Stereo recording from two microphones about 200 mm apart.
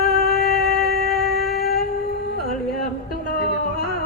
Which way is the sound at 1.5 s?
50° left (ahead or behind).